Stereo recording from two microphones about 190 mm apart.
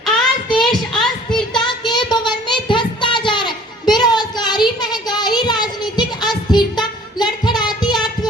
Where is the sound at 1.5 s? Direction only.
25° left (ahead or behind).